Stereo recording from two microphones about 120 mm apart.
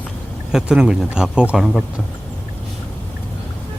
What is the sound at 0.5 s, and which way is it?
Speech, 5° right (ahead or behind).